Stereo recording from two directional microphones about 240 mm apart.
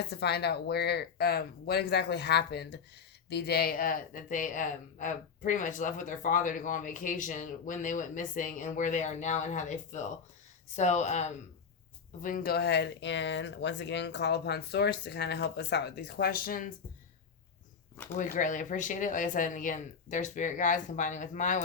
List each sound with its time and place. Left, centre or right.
0.1 s speech: left
18.2 s speech: left